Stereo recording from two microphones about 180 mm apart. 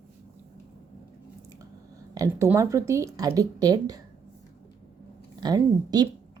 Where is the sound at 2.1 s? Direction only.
15° right (ahead or behind).